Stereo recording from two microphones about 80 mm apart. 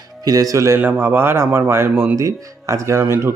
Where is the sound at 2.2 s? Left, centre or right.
Right.